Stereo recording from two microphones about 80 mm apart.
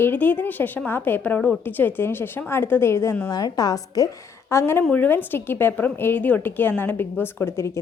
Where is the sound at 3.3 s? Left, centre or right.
Left.